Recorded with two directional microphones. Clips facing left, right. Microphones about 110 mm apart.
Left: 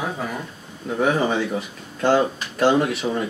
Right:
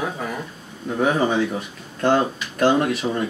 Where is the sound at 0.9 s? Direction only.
Centre (ahead or behind).